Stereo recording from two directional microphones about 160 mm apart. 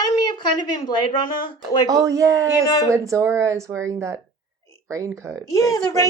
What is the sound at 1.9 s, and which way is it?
Speech, 20° right (ahead or behind).